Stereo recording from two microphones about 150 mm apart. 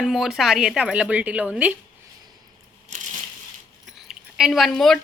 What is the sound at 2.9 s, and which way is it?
Crushing, 55° right (ahead or behind).